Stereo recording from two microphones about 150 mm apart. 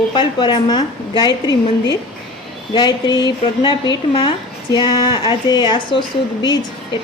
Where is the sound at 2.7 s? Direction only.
30° left (ahead or behind).